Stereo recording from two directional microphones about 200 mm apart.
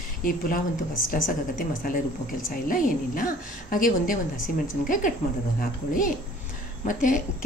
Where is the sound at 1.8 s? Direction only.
45° left (ahead or behind).